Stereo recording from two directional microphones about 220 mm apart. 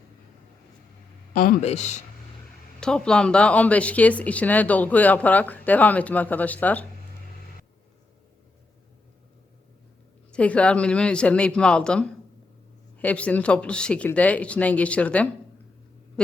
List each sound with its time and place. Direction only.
1.3 s speech: 35° left (ahead or behind)
2.8 s speech: 5° left (ahead or behind)
10.3 s speech: 5° left (ahead or behind)
16.2 s a sound: 5° left (ahead or behind)